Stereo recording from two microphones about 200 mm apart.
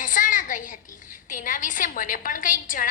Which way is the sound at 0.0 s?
40° left (ahead or behind).